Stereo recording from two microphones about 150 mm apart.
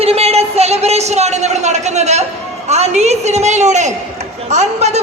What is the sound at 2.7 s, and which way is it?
A man's voice, 45° right (ahead or behind).